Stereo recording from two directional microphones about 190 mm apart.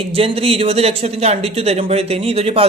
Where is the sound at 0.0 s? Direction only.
30° right (ahead or behind).